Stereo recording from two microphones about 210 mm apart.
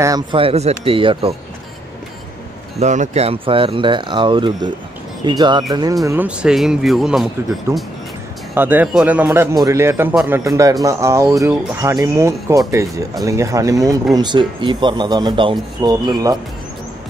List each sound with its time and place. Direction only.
0.0 s speech: 20° right (ahead or behind)
2.8 s speech: 35° right (ahead or behind); by 5.9 s 20° right (ahead or behind)
6.0 s speech: 5° right (ahead or behind)
7.7 s a man's voice: 10° right (ahead or behind)